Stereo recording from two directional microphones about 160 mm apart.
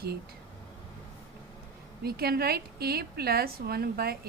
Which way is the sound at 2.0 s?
75° right (ahead or behind).